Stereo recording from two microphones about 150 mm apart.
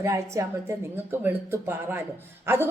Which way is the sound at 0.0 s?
20° right (ahead or behind).